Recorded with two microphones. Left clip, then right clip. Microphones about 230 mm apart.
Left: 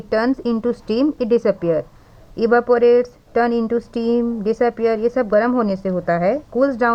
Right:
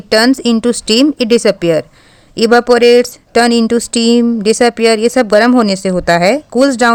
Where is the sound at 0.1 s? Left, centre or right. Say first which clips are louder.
Right 9 dB; right.